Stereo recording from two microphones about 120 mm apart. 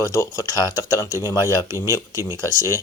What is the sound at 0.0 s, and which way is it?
Speech, 25° left (ahead or behind).